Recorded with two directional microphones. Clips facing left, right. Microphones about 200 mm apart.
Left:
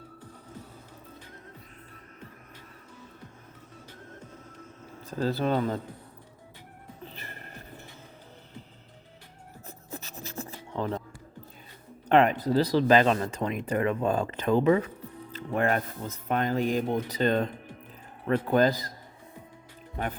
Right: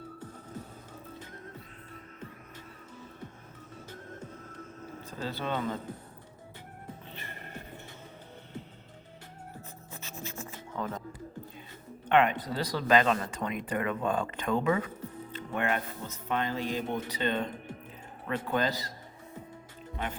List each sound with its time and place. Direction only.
5.1 s speech: 40° left (ahead or behind)
7.1 s music: 35° left (ahead or behind)
9.9 s music: 35° left (ahead or behind)
12.0 s speech: 35° left (ahead or behind)
15.3 s music: 35° left (ahead or behind)
16.3 s speech: 45° left (ahead or behind)